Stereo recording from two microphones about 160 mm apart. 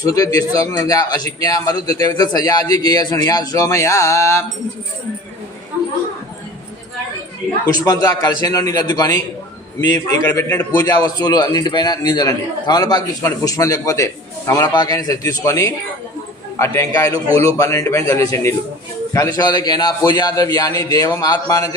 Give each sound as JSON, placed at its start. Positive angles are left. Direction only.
{"t": 0.0, "sound": "a man's voice", "side_deg": 25}
{"t": 7.9, "sound": "a man's voice", "side_deg": 25}
{"t": 10.2, "sound": "a man's voice", "side_deg": 15}